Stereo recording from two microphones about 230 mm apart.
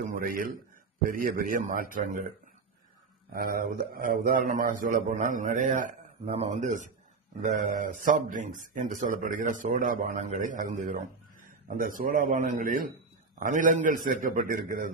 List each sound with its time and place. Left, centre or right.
0.1 s a man's voice: right
3.3 s a man's voice: right